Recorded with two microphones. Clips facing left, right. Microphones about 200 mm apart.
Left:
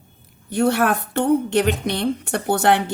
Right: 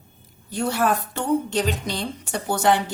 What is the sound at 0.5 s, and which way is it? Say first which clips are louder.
A woman's voice: left 4 dB; 60° left (ahead or behind).